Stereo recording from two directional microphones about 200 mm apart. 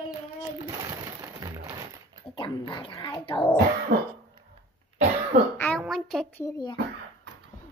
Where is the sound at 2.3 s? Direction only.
25° left (ahead or behind).